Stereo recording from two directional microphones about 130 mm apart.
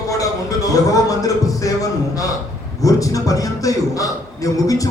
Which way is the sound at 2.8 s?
25° left (ahead or behind).